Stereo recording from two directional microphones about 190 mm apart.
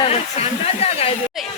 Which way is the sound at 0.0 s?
35° left (ahead or behind).